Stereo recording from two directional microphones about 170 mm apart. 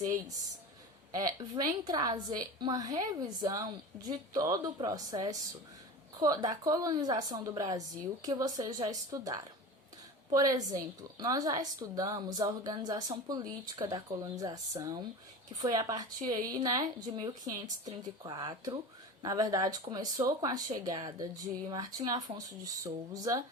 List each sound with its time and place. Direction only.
1.1 s a woman's voice: 20° right (ahead or behind)